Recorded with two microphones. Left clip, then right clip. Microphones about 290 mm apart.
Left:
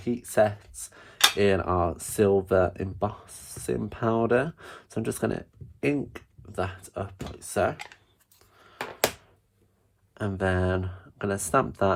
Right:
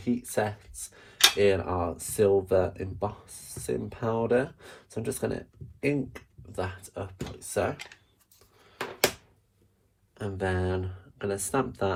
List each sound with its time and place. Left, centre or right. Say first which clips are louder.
0.0 s speech: left 6 dB; left
10.2 s speech: left 3 dB; left